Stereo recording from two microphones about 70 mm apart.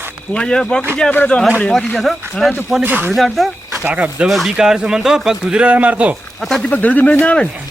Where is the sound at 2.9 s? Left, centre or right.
Right.